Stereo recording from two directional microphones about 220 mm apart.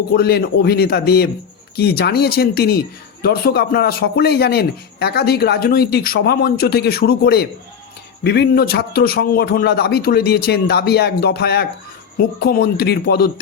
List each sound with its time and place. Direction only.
0.1 s speech: 45° left (ahead or behind)